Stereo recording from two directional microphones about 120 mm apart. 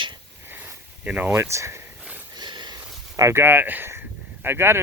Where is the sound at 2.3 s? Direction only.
40° right (ahead or behind).